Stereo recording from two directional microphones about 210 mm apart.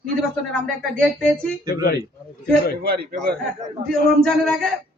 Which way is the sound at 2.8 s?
45° right (ahead or behind).